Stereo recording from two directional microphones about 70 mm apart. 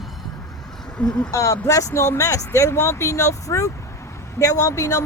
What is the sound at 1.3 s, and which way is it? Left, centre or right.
Speech, left.